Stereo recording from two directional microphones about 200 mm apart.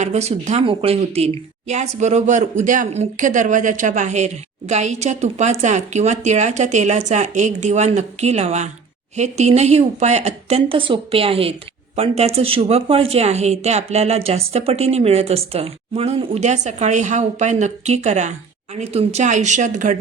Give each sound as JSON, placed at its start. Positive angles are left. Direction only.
{"t": 0.0, "sound": "speech", "side_deg": -35}